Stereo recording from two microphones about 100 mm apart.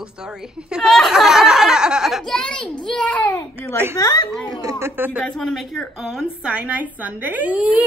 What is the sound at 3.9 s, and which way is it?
Speech, 40° left (ahead or behind).